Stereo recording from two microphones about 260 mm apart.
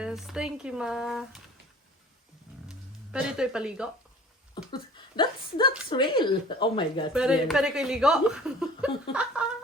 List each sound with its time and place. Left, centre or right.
0.0 s speech: centre
2.6 s speech: centre
4.7 s speech: centre
7.1 s speech: centre